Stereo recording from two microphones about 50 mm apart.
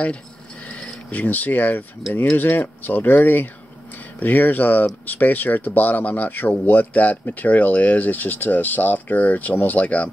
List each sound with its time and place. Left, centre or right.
0.7 s speech: left